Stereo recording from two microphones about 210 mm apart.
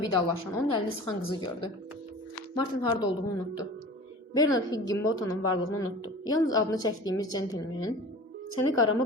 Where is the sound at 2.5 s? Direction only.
20° left (ahead or behind).